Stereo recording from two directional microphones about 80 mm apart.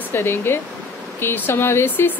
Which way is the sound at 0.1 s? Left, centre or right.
Left.